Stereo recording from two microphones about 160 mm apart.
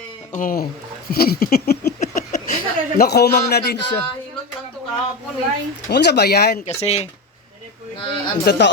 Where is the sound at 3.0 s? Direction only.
90° left.